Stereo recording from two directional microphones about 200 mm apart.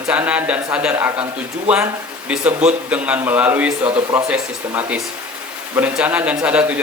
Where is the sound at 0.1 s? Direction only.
5° right (ahead or behind).